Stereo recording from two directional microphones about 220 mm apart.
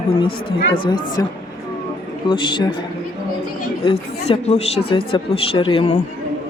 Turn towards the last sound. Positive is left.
turn(degrees=30)  # may be behind; listen again after turning